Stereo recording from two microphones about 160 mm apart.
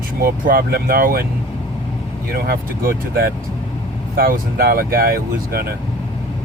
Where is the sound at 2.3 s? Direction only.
70° right (ahead or behind).